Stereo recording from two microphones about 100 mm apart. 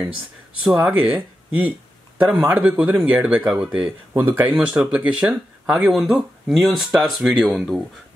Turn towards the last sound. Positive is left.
turn(degrees=-5)  # may be behind; listen again after turning